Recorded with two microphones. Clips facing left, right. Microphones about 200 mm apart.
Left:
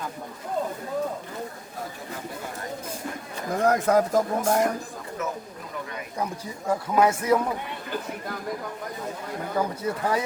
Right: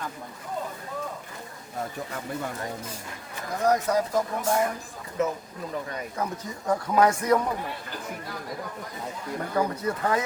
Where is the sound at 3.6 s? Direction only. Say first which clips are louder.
Left 2 dB; 50° left (ahead or behind).